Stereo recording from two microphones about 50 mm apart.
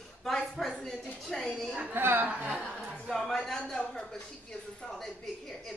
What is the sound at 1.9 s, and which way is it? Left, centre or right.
Speech, right.